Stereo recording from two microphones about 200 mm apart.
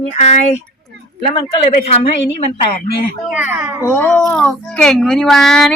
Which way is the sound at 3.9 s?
5° left (ahead or behind).